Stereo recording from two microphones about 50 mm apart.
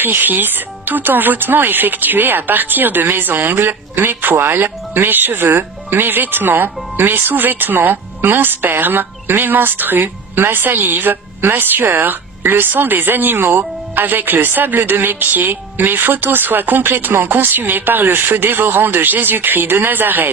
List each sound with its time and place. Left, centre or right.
0.0 s speech: right